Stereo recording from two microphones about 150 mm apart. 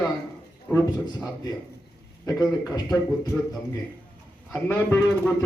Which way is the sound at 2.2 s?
25° left (ahead or behind).